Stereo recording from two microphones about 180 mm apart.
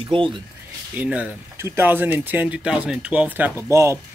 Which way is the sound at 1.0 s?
10° right (ahead or behind).